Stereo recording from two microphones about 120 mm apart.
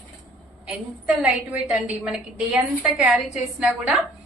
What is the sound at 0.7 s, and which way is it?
A woman's voice, 10° right (ahead or behind).